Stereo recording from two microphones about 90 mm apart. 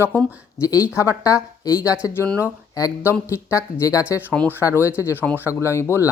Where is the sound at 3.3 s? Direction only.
35° left (ahead or behind).